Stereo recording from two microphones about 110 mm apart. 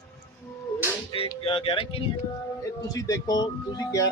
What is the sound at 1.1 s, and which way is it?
Speech, 60° left (ahead or behind).